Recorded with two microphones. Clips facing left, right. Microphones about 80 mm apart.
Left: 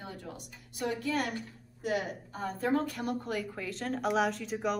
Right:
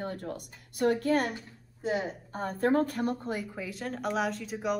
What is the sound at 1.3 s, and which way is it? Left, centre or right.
Speech, right.